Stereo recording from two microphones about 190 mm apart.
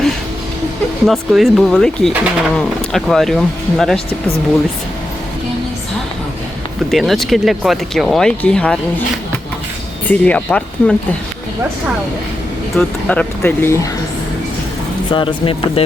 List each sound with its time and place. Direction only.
1.0 s speech: centre (ahead or behind)
6.9 s speech: centre (ahead or behind)
10.1 s speech: 5° left (ahead or behind)
12.7 s speech: 5° left (ahead or behind)
15.1 s speech: 25° left (ahead or behind)